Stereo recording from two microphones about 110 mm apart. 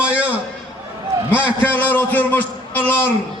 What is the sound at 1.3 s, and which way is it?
Speech, 10° right (ahead or behind).